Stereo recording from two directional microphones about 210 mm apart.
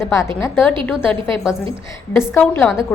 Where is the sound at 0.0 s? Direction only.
15° left (ahead or behind).